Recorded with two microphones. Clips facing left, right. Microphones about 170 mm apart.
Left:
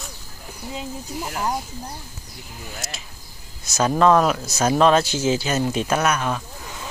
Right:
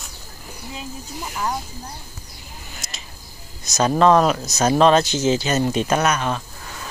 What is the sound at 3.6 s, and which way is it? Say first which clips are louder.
Speech: right 1 dB; 5° left (ahead or behind).